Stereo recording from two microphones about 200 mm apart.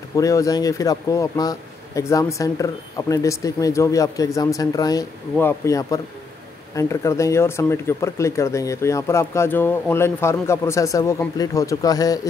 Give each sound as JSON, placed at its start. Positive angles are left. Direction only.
{"t": 0.1, "sound": "speech", "side_deg": 15}